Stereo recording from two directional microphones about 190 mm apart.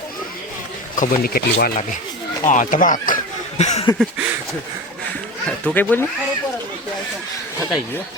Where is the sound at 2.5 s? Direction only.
45° left (ahead or behind).